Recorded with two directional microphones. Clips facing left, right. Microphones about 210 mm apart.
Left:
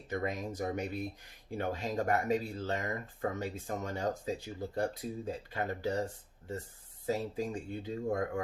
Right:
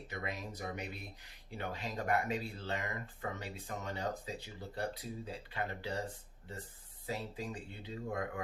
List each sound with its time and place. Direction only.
0.1 s speech: 45° left (ahead or behind)
7.1 s speech: 45° left (ahead or behind)